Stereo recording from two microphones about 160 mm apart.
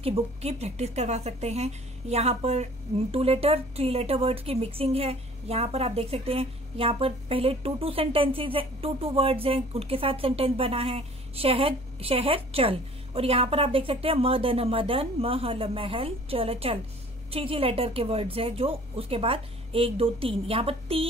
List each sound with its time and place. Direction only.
0.0 s a woman's voice: 40° right (ahead or behind)